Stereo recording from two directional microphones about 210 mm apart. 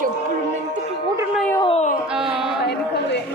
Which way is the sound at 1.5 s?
25° left (ahead or behind).